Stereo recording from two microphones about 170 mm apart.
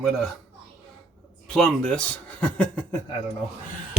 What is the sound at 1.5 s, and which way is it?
Speech, 5° left (ahead or behind).